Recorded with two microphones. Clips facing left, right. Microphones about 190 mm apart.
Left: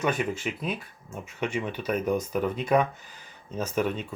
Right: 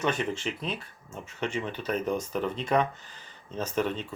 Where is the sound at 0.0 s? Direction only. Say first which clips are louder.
Left 1 dB; 10° left (ahead or behind).